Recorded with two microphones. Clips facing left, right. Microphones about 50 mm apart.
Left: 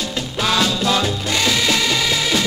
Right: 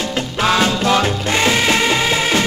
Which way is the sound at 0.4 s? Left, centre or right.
Right.